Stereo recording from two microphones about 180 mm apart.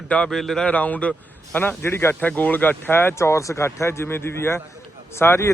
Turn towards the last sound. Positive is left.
turn(degrees=10)  # may be behind; listen again after turning